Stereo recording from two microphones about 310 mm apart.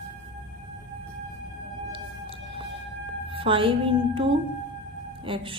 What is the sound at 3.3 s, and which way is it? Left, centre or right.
A woman's voice, centre.